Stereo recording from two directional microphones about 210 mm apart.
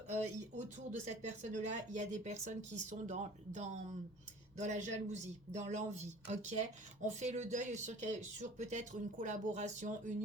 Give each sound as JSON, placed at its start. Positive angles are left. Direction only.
{"t": 0.1, "sound": "speech", "side_deg": -35}